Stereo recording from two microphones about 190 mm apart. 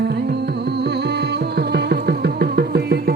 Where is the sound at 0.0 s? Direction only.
60° right (ahead or behind).